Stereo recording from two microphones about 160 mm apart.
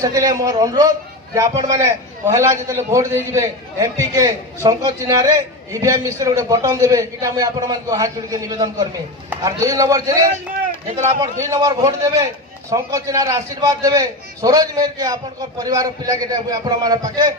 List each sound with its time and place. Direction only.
0.0 s a man's voice: 20° right (ahead or behind)